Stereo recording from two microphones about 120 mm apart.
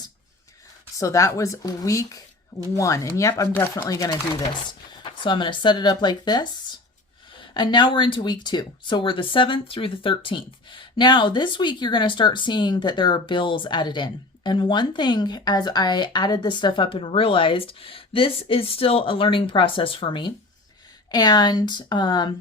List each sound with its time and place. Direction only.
0.9 s speech: 25° left (ahead or behind)
5.1 s speech: 40° left (ahead or behind)
7.5 s speech: 40° left (ahead or behind)